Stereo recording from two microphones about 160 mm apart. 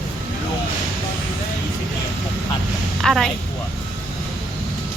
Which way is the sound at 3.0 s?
Centre (ahead or behind).